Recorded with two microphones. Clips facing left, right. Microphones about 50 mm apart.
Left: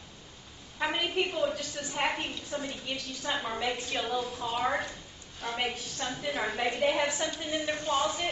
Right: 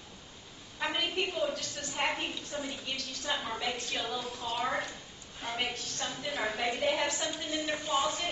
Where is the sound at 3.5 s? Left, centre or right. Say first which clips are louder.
Left 3 dB; centre.